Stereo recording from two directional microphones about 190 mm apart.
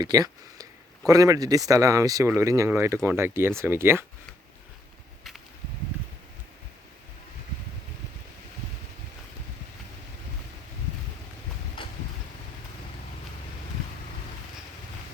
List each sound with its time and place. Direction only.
0.0 s speech: 20° right (ahead or behind)